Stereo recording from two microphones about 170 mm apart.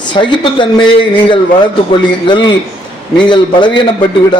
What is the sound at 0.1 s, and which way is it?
A man's voice, 30° left (ahead or behind).